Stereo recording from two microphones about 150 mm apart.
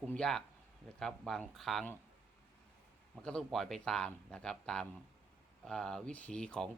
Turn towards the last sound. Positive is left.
turn(degrees=5)  # may be behind; listen again after turning